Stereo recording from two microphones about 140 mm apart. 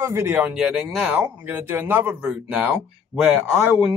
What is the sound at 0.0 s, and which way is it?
Speech, 15° right (ahead or behind).